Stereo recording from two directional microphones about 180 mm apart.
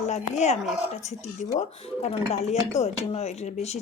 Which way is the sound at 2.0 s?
40° left (ahead or behind).